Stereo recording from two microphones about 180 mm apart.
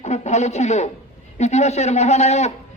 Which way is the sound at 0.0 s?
40° left (ahead or behind).